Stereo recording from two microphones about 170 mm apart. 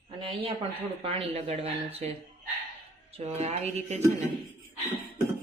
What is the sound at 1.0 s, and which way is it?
Speech, 35° right (ahead or behind).